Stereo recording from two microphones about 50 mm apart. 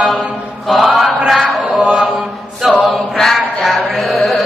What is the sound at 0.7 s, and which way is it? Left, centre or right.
Chant, centre.